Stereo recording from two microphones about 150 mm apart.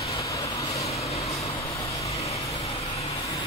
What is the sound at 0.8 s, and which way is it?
Vehicle, 45° left (ahead or behind).